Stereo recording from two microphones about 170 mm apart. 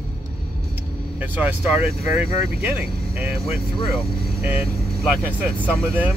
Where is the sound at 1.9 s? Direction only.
35° left (ahead or behind).